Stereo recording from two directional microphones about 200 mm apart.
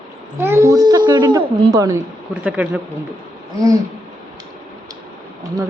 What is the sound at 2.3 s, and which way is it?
Speech, 5° right (ahead or behind).